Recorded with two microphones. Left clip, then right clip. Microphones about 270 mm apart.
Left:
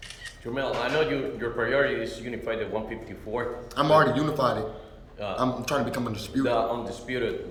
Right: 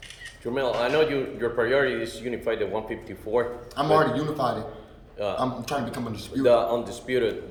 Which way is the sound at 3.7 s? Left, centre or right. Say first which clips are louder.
Left 1 dB; centre.